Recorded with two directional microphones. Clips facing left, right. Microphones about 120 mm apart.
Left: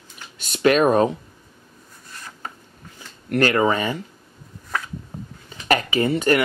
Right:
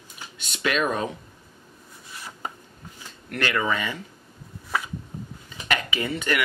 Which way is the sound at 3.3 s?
40° left (ahead or behind).